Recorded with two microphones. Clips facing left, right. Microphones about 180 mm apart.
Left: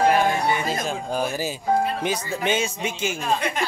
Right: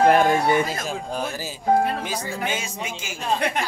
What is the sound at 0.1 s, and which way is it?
Speech, 50° right (ahead or behind).